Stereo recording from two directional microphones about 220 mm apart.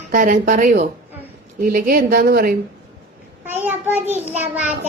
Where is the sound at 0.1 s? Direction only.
40° right (ahead or behind).